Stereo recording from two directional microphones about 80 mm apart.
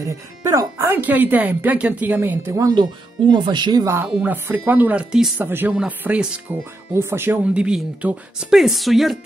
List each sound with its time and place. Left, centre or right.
0.0 s speech: right
2.7 s speech: right
4.1 s speech: centre
6.9 s speech: right
7.5 s a woman's voice: centre